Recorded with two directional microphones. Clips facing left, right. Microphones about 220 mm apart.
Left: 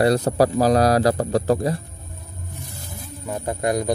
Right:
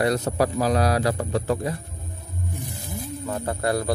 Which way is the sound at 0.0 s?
35° left (ahead or behind).